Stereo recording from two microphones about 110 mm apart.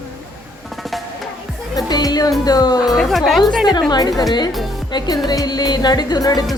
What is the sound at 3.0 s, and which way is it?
Speech, centre (ahead or behind).